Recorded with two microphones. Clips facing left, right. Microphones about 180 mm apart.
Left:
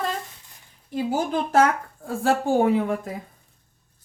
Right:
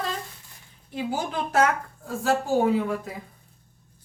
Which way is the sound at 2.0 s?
55° left (ahead or behind).